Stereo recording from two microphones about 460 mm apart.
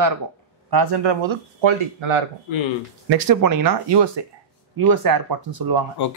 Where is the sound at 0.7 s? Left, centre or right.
Right.